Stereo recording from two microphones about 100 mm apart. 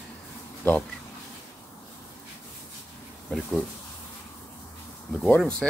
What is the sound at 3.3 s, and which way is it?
Speech, 5° left (ahead or behind).